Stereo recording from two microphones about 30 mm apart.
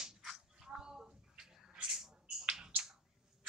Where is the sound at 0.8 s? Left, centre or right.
Right.